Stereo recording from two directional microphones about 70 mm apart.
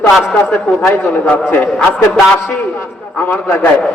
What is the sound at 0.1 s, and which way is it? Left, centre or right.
Speech, centre.